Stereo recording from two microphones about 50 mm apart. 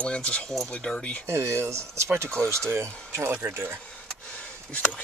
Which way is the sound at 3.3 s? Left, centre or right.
Right.